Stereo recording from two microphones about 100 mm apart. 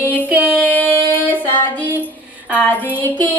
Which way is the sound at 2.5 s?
20° left (ahead or behind).